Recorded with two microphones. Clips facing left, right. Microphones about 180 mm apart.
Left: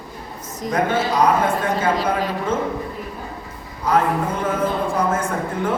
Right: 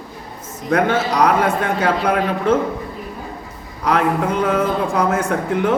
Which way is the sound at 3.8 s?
75° right (ahead or behind).